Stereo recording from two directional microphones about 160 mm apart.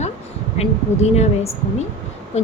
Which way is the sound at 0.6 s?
40° left (ahead or behind).